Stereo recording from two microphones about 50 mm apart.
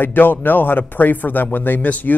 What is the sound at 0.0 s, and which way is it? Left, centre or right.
A man's voice, left.